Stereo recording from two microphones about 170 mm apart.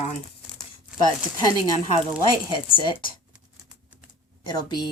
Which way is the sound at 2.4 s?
25° left (ahead or behind).